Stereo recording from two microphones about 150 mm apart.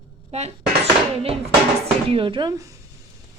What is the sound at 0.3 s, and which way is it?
Speech, 45° right (ahead or behind).